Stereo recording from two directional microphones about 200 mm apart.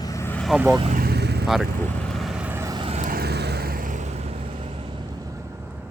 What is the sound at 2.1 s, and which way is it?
Vehicle, centre (ahead or behind).